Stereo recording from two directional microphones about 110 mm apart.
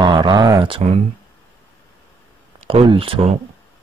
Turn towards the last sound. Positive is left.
turn(degrees=-55)  # may be behind; listen again after turning